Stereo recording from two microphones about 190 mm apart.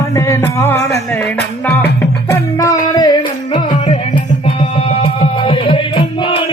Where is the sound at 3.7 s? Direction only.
40° left (ahead or behind).